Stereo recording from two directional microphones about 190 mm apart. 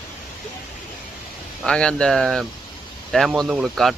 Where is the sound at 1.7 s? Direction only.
5° left (ahead or behind).